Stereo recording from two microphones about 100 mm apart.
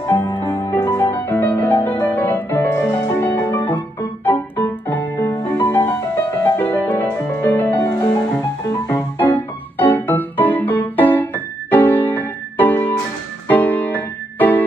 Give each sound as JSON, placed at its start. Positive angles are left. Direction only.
{"t": 0.0, "sound": "music", "side_deg": 30}
{"t": 7.9, "sound": "music", "side_deg": 30}